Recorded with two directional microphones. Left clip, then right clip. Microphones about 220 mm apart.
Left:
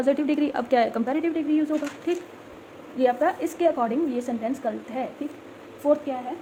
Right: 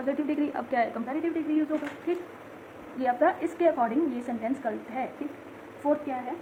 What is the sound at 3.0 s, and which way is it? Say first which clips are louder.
A woman's voice: left 3 dB; 30° left (ahead or behind).